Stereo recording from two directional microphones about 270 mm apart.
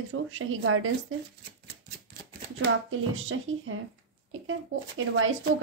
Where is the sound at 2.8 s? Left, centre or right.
Right.